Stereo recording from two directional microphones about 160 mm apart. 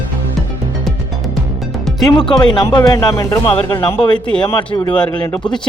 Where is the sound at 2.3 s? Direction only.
30° left (ahead or behind).